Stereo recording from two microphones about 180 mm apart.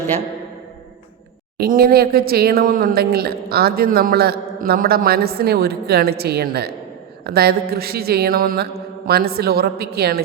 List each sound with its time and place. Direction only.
1.5 s speech: 55° right (ahead or behind)